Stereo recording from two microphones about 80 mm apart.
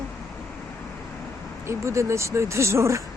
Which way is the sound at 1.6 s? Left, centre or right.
Right.